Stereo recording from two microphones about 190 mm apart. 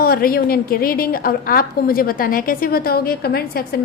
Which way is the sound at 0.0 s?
50° left (ahead or behind).